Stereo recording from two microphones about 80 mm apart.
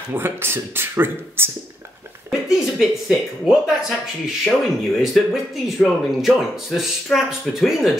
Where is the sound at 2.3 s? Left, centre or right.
Centre.